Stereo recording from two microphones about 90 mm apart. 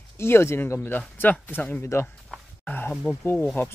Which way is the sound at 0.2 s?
30° left (ahead or behind).